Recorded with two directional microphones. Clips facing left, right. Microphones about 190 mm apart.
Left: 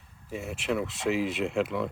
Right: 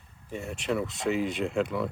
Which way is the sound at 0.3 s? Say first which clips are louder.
Even; 5° left (ahead or behind).